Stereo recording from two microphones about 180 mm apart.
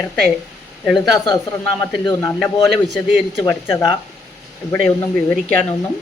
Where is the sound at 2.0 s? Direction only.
15° left (ahead or behind).